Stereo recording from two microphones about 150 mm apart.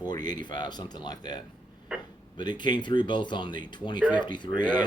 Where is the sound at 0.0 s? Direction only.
30° left (ahead or behind).